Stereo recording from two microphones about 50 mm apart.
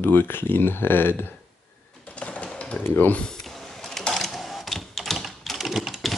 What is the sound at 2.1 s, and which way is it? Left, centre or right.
Sewing machine, left.